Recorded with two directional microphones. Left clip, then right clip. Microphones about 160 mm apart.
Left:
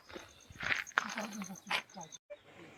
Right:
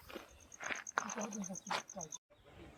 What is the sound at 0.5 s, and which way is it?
Walk, 20° left (ahead or behind).